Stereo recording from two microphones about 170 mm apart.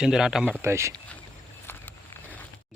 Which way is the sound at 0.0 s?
5° right (ahead or behind).